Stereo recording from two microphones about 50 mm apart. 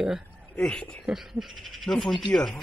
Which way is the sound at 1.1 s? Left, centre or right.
Centre.